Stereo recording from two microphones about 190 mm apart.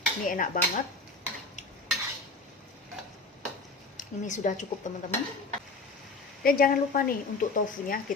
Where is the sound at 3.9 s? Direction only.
40° left (ahead or behind).